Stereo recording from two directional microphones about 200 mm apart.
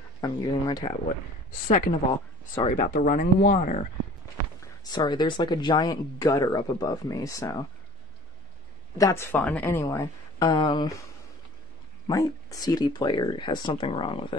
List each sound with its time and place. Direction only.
0.2 s speech: 20° left (ahead or behind)
1.7 s speech: 45° left (ahead or behind)
4.6 s speech: 20° left (ahead or behind)
8.9 s speech: 15° left (ahead or behind)
12.1 s speech: 15° left (ahead or behind)